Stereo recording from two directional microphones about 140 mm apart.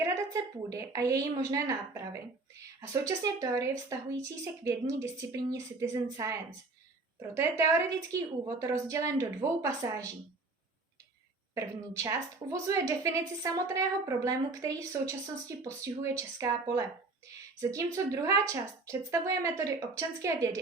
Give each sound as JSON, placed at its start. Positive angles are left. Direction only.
{"t": 0.0, "sound": "a woman's voice", "side_deg": -25}
{"t": 11.5, "sound": "a woman's voice", "side_deg": -25}